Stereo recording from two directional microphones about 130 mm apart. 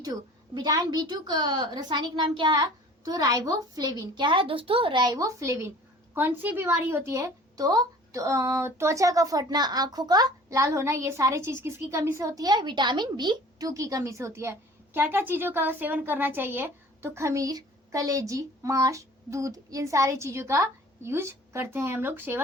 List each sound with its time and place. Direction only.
0.0 s a woman's voice: 30° right (ahead or behind)